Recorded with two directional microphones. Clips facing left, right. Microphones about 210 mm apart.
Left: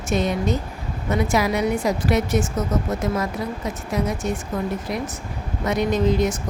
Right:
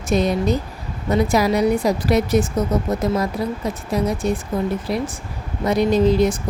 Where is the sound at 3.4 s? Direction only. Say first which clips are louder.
Right 4 dB; 35° right (ahead or behind).